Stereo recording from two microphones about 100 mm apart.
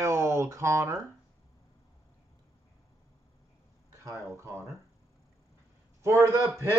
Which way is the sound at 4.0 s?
30° right (ahead or behind).